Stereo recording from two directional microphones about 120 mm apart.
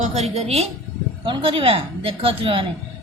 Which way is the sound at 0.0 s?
65° right (ahead or behind).